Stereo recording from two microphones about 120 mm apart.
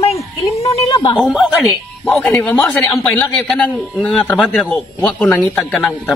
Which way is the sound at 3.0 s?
10° left (ahead or behind).